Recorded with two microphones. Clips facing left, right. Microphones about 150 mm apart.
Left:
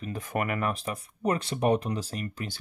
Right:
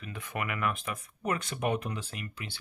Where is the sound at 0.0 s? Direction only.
40° left (ahead or behind).